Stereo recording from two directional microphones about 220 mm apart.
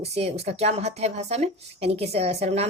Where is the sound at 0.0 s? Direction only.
30° right (ahead or behind).